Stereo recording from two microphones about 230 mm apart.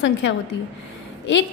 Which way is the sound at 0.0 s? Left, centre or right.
Left.